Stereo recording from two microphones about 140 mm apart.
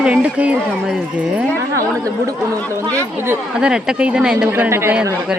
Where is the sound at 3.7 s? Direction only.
5° right (ahead or behind).